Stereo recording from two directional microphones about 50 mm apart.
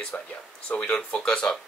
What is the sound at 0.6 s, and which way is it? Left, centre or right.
Speech, left.